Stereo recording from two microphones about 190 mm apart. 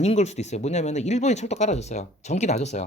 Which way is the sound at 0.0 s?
35° left (ahead or behind).